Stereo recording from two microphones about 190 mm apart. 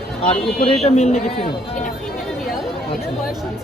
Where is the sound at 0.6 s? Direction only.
30° left (ahead or behind).